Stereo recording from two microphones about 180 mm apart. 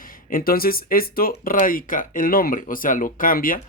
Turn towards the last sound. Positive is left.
turn(degrees=50)  # may be behind; listen again after turning